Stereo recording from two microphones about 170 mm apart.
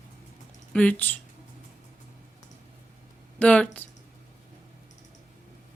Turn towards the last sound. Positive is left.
turn(degrees=10)  # may be behind; listen again after turning